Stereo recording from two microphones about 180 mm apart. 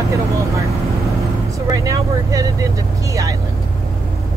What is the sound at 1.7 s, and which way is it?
Speech, 20° right (ahead or behind).